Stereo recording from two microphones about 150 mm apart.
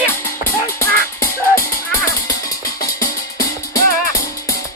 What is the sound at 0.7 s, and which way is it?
Music, 20° left (ahead or behind).